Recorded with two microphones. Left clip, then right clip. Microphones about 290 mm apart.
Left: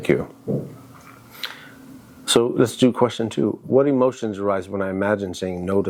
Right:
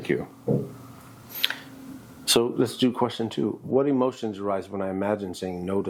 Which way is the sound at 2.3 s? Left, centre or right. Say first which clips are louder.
Left 5 dB; centre.